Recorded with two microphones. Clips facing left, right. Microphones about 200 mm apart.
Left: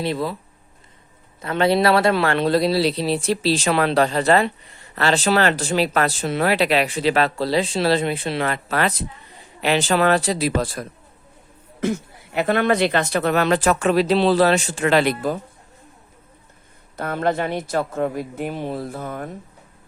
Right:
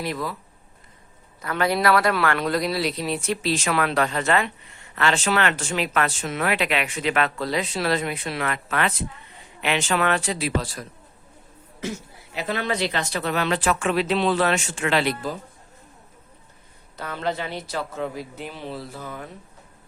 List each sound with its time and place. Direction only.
0.0 s speech: 30° left (ahead or behind)
1.4 s a man's voice: 25° left (ahead or behind); by 15.4 s 55° left (ahead or behind)
17.0 s a woman's voice: 50° left (ahead or behind)